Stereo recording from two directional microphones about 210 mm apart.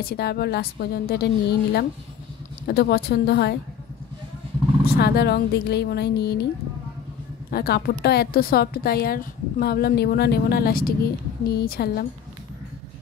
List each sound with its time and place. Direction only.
0.0 s a woman's voice: 50° left (ahead or behind)
4.9 s a woman's voice: 50° left (ahead or behind)
7.5 s a woman's voice: 45° left (ahead or behind)